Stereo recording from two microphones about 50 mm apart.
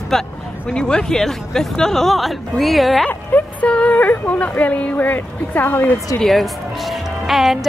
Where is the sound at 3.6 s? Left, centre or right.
Left.